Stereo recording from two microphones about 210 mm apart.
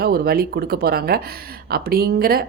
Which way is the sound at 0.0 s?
45° right (ahead or behind).